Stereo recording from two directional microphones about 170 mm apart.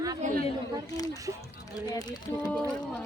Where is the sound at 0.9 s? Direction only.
20° left (ahead or behind).